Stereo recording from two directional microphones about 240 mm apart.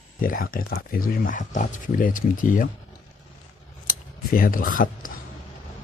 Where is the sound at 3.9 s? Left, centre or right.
Left.